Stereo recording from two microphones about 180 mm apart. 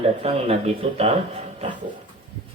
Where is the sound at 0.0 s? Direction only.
35° right (ahead or behind).